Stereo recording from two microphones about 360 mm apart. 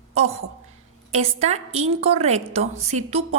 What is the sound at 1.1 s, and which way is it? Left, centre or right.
A woman's voice, centre.